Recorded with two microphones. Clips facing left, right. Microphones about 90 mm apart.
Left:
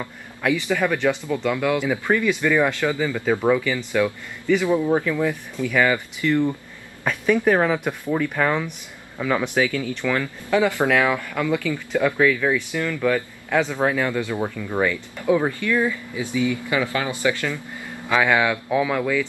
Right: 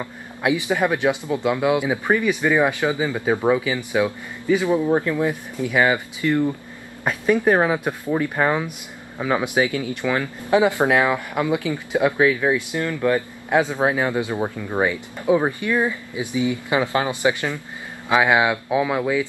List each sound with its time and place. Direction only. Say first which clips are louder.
0.0 s speech: right 1 dB; 15° right (ahead or behind)